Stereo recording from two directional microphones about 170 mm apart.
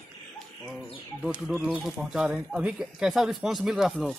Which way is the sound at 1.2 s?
5° right (ahead or behind).